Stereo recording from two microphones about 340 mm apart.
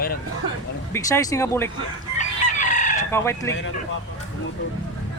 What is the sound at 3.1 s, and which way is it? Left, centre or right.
Speech, centre.